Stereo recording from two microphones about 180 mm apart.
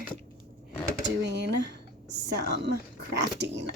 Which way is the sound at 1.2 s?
70° right (ahead or behind).